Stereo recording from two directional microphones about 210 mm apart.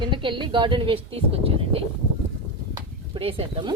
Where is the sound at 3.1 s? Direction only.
25° right (ahead or behind).